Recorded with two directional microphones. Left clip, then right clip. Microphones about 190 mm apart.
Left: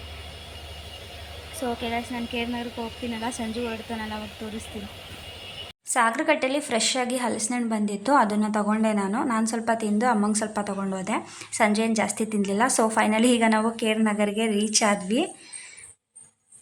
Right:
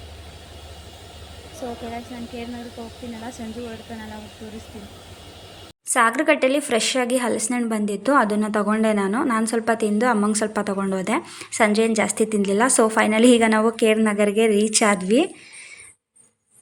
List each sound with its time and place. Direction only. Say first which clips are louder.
1.9 s speech: left 4 dB; 5° left (ahead or behind)
5.9 s a woman's voice: right 4 dB; 15° right (ahead or behind)